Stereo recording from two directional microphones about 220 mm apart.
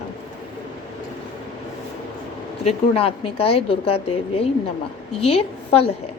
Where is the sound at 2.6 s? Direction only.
25° left (ahead or behind).